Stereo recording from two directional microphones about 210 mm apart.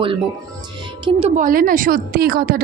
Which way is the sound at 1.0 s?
35° right (ahead or behind).